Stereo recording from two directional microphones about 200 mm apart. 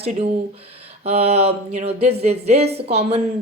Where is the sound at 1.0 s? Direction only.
30° right (ahead or behind).